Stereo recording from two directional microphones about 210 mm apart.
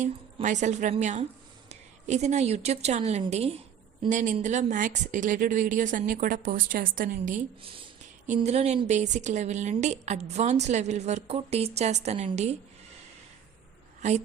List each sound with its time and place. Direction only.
0.0 s a woman's voice: 35° right (ahead or behind)
14.0 s a woman's voice: 35° right (ahead or behind)